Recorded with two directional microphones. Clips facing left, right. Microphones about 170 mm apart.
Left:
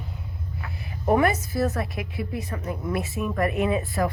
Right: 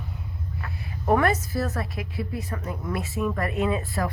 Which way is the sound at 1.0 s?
15° left (ahead or behind).